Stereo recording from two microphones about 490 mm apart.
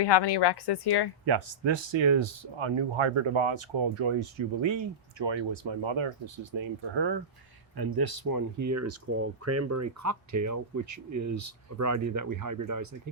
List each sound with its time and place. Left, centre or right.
0.0 s speech: left
1.2 s speech: right
7.8 s speech: right